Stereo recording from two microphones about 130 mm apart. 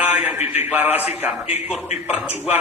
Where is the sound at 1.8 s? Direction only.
55° left (ahead or behind).